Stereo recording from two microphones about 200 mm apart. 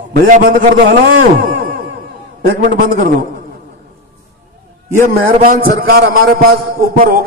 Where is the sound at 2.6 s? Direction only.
45° right (ahead or behind).